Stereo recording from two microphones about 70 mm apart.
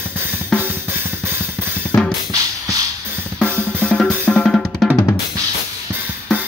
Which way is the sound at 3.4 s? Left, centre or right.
Right.